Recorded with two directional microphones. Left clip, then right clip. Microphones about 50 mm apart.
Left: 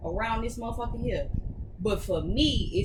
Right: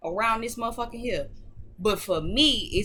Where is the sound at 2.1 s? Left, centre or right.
Right.